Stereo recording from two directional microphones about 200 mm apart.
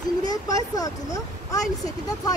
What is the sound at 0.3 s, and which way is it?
Speech, 20° left (ahead or behind).